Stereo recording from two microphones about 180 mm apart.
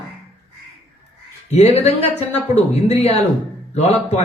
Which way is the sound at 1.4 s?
35° left (ahead or behind).